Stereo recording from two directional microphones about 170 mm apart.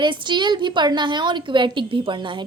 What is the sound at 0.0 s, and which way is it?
A woman's voice, 25° right (ahead or behind).